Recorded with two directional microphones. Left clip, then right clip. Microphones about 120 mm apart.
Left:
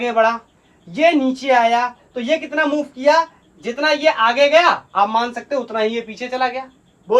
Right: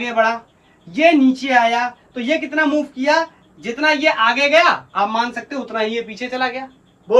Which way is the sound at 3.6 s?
25° left (ahead or behind).